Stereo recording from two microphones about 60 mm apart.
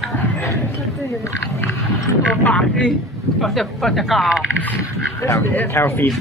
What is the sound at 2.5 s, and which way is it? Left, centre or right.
Speech, centre.